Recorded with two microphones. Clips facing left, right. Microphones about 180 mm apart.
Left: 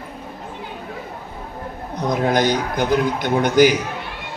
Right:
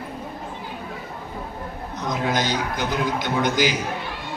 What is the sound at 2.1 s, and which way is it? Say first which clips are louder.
A man's voice: left 6 dB; 55° left (ahead or behind).